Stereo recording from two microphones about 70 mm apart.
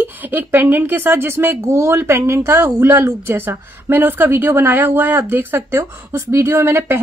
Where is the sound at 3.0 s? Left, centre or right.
Right.